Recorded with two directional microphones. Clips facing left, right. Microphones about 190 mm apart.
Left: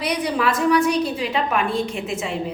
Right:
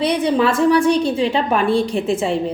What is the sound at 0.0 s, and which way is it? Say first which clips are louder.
A woman's voice: right 6 dB; 25° right (ahead or behind).